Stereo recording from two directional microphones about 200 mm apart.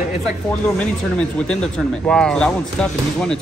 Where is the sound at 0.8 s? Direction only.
5° left (ahead or behind).